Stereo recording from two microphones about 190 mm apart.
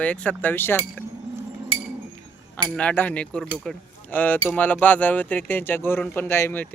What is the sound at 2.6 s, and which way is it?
Speech, 5° left (ahead or behind).